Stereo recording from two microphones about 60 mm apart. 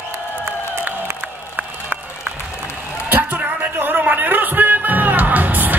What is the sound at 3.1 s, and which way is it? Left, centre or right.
Music, right.